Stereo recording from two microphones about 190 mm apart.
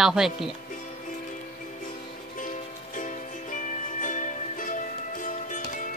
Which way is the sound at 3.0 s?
45° left (ahead or behind).